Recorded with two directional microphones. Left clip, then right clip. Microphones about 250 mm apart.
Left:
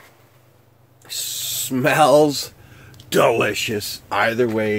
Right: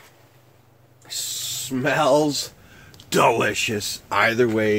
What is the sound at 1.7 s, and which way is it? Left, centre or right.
Speech, left.